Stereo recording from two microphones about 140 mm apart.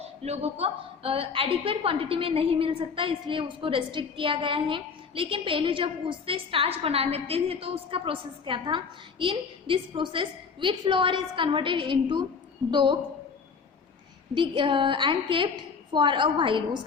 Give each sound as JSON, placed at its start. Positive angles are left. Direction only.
{"t": 0.0, "sound": "a woman's voice", "side_deg": -50}
{"t": 14.3, "sound": "a woman's voice", "side_deg": -35}